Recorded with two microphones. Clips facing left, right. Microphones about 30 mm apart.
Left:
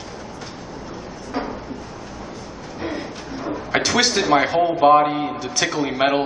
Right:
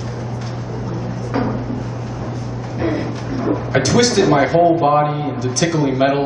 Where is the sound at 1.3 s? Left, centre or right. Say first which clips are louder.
Right 6 dB; centre.